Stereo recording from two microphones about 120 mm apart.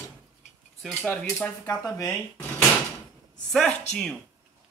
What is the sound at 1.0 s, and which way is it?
Speech, 15° left (ahead or behind).